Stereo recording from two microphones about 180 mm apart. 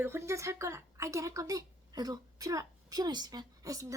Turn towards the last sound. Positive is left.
turn(degrees=-20)  # may be behind; listen again after turning